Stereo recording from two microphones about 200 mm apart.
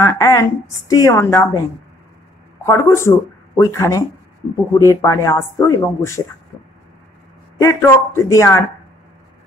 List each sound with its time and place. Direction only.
0.0 s a woman's voice: 15° left (ahead or behind)
2.6 s a woman's voice: 15° left (ahead or behind)
7.5 s a woman's voice: 15° left (ahead or behind)